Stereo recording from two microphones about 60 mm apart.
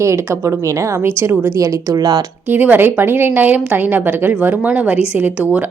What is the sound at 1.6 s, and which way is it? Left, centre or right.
Speech, right.